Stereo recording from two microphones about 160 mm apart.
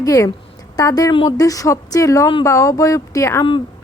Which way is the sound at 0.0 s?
20° left (ahead or behind).